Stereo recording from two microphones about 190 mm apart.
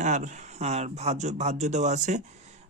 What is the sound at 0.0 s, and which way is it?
Speech, 40° right (ahead or behind).